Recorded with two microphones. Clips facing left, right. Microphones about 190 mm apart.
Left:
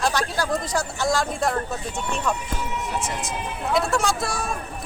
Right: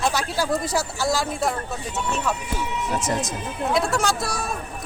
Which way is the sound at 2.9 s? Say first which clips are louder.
Right 4 dB; 40° right (ahead or behind).